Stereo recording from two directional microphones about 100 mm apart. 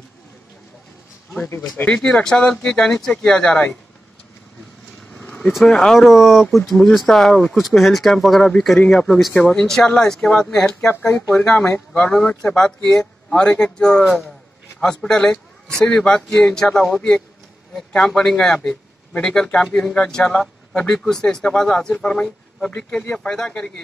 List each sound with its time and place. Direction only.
2.0 s speech: 5° left (ahead or behind)
5.1 s vehicle: 10° left (ahead or behind)
5.5 s speech: 5° left (ahead or behind)
11.3 s speech: 20° left (ahead or behind)
11.9 s speech: 5° left (ahead or behind)